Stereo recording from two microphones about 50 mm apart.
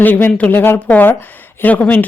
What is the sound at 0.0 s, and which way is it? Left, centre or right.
Speech, left.